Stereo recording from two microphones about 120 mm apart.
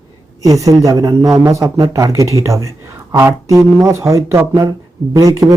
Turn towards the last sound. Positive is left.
turn(degrees=-25)  # may be behind; listen again after turning